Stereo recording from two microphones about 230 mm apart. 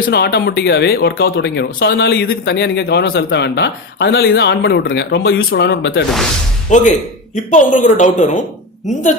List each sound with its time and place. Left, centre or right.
0.0 s speech: left
6.7 s a woman's voice: left